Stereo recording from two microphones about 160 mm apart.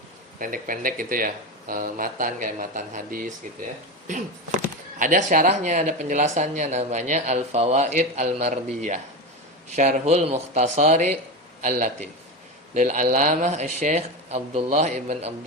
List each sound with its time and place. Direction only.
0.3 s speech: 60° right (ahead or behind)